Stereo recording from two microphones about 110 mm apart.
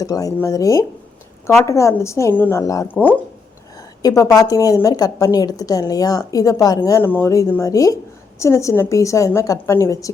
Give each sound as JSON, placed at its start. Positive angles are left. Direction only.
{"t": 0.0, "sound": "a woman's voice", "side_deg": 35}
{"t": 2.6, "sound": "a woman's voice", "side_deg": 30}
{"t": 2.8, "sound": "speech", "side_deg": 15}
{"t": 3.8, "sound": "a woman's voice", "side_deg": 30}
{"t": 7.0, "sound": "a woman's voice", "side_deg": 20}